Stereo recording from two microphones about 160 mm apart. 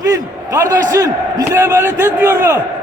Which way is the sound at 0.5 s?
20° right (ahead or behind).